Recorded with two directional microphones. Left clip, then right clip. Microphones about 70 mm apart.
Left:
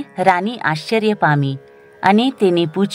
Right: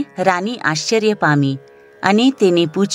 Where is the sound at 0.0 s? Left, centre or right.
Right.